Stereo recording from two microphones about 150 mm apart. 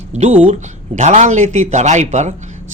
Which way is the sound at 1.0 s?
50° right (ahead or behind).